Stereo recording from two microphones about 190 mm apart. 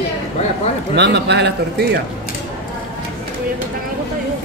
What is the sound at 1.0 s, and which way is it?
A man's voice, 65° right (ahead or behind).